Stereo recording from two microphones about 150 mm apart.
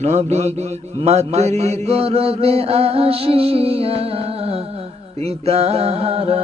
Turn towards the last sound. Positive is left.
turn(degrees=-40)  # may be behind; listen again after turning